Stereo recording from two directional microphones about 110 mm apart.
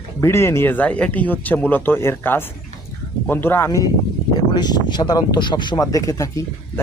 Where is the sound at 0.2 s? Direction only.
25° left (ahead or behind).